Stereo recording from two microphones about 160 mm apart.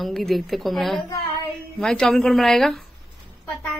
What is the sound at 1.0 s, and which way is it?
Child singing, 20° left (ahead or behind).